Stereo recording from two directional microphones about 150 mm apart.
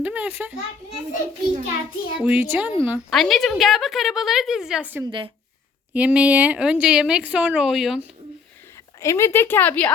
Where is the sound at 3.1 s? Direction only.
Centre (ahead or behind).